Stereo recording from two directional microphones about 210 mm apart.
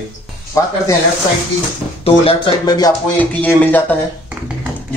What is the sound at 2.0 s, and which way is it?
Speech, 20° left (ahead or behind).